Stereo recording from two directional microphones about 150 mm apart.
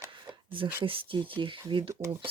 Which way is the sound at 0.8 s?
35° right (ahead or behind).